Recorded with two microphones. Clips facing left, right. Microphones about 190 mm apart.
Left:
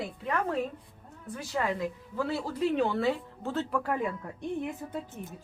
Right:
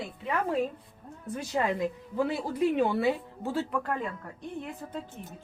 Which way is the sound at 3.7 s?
5° left (ahead or behind).